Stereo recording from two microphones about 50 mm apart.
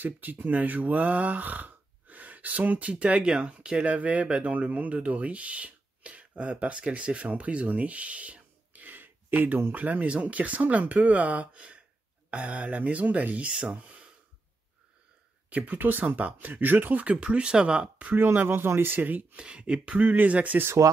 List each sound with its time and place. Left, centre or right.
0.0 s speech: right
15.5 s speech: right
17.0 s speech: right
18.1 s speech: right
19.3 s speech: right
20.8 s speech: right